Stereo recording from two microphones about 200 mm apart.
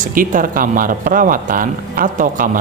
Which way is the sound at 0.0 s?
45° right (ahead or behind).